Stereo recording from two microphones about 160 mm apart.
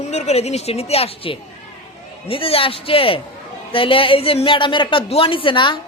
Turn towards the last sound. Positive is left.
turn(degrees=30)  # may be behind; listen again after turning